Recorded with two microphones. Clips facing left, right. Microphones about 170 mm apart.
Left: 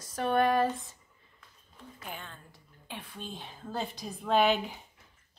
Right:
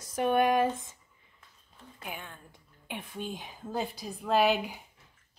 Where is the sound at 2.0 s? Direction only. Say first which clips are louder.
Right 2 dB; 10° right (ahead or behind).